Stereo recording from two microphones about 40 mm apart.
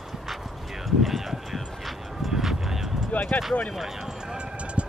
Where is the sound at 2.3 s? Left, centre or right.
Centre.